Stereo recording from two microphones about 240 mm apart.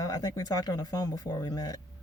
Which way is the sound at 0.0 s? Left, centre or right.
Centre.